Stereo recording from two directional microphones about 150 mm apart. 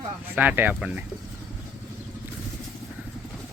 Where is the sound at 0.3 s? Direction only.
10° right (ahead or behind).